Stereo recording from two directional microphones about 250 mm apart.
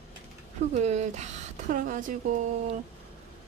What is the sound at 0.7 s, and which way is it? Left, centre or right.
Speech, right.